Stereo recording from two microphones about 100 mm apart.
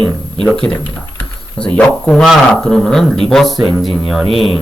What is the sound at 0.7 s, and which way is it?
Speech, 30° left (ahead or behind).